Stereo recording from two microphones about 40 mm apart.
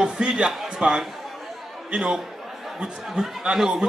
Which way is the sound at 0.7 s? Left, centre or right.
Centre.